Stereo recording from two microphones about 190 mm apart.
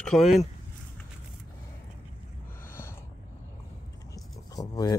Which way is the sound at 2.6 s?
15° left (ahead or behind).